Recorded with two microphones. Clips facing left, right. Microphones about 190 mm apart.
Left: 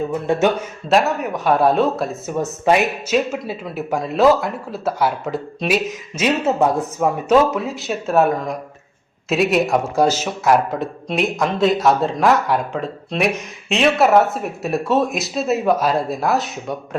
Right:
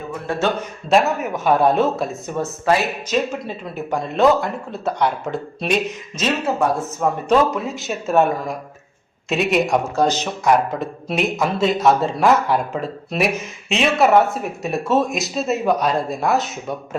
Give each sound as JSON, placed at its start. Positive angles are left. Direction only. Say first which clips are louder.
{"t": 0.3, "sound": "speech", "louder": "left 4 dB", "side_deg": 20}
{"t": 0.9, "sound": "speech", "louder": "even", "side_deg": 0}
{"t": 6.4, "sound": "speech", "louder": "left 2 dB", "side_deg": 20}
{"t": 7.3, "sound": "speech", "louder": "left 2 dB", "side_deg": 0}